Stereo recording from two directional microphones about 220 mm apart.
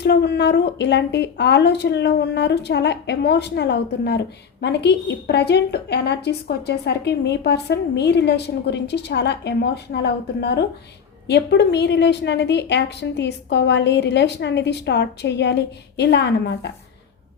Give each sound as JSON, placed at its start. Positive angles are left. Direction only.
{"t": 0.0, "sound": "a woman's voice", "side_deg": 50}